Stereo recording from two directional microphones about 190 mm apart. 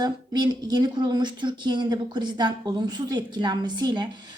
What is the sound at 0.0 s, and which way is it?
A woman's voice, 20° right (ahead or behind).